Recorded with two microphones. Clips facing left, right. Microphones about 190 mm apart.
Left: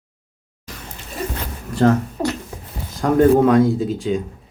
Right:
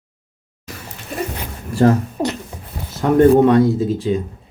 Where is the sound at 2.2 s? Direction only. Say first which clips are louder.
Right 1 dB; 20° right (ahead or behind).